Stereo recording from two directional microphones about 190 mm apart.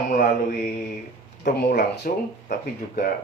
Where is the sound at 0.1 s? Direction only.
50° left (ahead or behind).